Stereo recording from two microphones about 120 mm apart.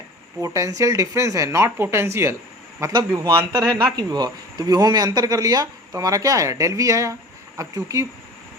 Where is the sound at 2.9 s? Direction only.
35° right (ahead or behind).